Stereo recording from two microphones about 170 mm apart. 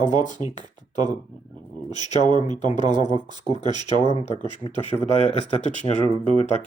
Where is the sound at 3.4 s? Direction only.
25° right (ahead or behind).